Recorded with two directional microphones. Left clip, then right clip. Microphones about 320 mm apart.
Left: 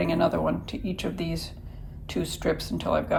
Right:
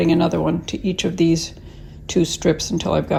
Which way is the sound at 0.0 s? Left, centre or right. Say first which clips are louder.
Right 6 dB; centre.